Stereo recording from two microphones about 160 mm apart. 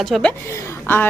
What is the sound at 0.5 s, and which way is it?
Speech, 20° left (ahead or behind).